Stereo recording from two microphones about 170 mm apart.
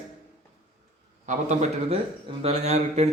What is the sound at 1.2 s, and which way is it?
A man's voice, 45° right (ahead or behind).